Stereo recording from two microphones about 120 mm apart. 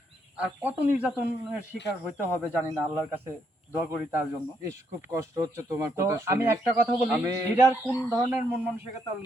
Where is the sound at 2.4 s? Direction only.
20° right (ahead or behind).